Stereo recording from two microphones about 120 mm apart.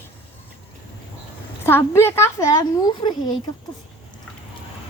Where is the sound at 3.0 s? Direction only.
40° left (ahead or behind).